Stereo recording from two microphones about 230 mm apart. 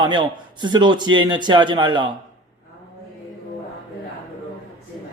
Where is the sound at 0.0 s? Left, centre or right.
Centre.